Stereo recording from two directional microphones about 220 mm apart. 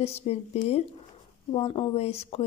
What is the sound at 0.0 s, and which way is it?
Speech, 30° left (ahead or behind).